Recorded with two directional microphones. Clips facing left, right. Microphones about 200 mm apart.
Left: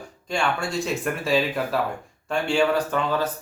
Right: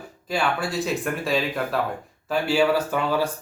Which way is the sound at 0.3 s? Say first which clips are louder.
Right 1 dB; 5° right (ahead or behind).